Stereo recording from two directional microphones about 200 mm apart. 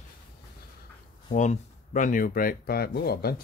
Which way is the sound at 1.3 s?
40° left (ahead or behind).